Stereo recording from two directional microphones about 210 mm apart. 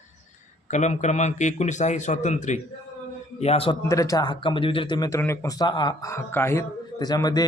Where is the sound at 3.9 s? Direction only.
15° left (ahead or behind).